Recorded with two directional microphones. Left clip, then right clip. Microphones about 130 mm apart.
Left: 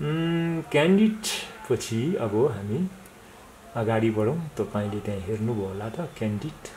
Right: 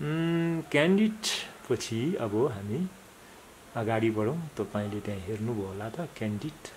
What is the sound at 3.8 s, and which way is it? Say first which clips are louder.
Speech: left 4 dB; 30° right (ahead or behind).